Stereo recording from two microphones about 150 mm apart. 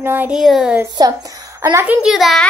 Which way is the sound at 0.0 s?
15° right (ahead or behind).